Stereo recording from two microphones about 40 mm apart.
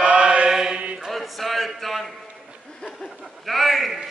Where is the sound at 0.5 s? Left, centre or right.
Centre.